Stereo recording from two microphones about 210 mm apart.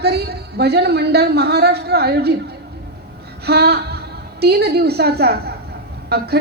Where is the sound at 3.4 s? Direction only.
50° right (ahead or behind).